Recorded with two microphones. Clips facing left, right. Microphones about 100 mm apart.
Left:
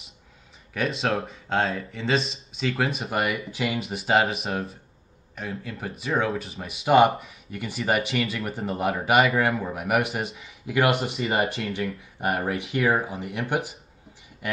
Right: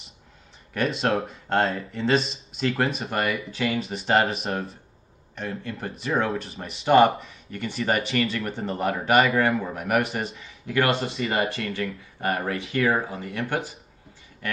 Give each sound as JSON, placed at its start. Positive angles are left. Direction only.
{"t": 0.7, "sound": "speech", "side_deg": 0}
{"t": 10.9, "sound": "speech", "side_deg": -30}
{"t": 11.1, "sound": "speech", "side_deg": 30}
{"t": 14.4, "sound": "a sound", "side_deg": 15}